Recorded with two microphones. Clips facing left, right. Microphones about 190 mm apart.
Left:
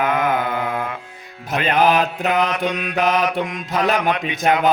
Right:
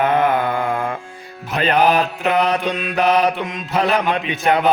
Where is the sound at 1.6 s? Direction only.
35° right (ahead or behind).